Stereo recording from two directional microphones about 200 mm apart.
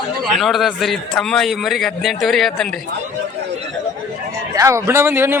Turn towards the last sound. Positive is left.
turn(degrees=-10)  # may be behind; listen again after turning